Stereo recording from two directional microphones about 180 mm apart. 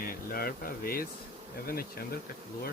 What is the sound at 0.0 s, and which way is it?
Speech, 55° left (ahead or behind).